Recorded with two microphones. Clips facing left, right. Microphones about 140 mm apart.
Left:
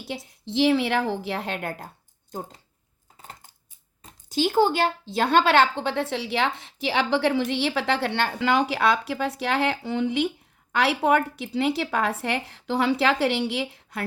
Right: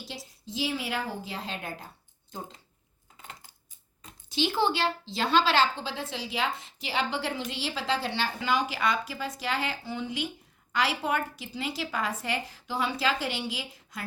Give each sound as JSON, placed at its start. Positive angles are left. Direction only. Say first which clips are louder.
{"t": 0.1, "sound": "a woman's voice", "louder": "left 9 dB", "side_deg": 60}
{"t": 0.4, "sound": "speech", "louder": "left 11 dB", "side_deg": 70}
{"t": 2.3, "sound": "speech", "louder": "left 5 dB", "side_deg": 45}
{"t": 3.2, "sound": "coin", "louder": "left 2 dB", "side_deg": 40}
{"t": 4.0, "sound": "speech", "louder": "left 5 dB", "side_deg": 45}